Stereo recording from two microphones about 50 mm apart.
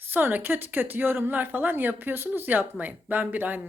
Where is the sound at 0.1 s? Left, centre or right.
Right.